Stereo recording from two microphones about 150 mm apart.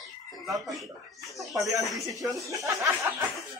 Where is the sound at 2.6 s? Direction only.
20° right (ahead or behind).